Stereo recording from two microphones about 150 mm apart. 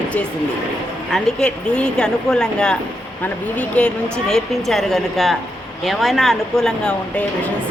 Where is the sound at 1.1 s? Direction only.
5° left (ahead or behind).